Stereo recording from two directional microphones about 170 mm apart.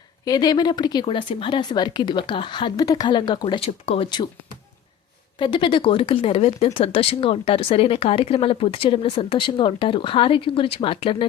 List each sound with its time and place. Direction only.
0.3 s speech: 25° left (ahead or behind)
5.4 s speech: 30° left (ahead or behind)